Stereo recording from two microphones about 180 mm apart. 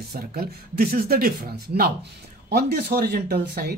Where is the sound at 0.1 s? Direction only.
60° right (ahead or behind).